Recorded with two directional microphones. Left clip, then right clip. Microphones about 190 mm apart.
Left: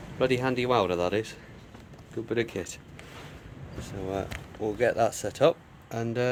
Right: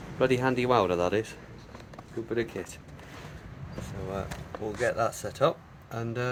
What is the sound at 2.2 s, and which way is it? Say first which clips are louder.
Speech: left 2 dB; 35° left (ahead or behind).